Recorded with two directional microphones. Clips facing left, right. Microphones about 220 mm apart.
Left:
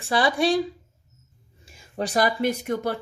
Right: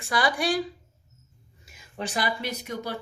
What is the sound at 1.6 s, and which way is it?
Speech, 30° left (ahead or behind).